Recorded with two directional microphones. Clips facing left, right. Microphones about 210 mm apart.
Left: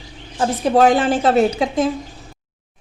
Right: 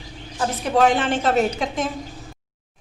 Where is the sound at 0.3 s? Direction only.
35° left (ahead or behind).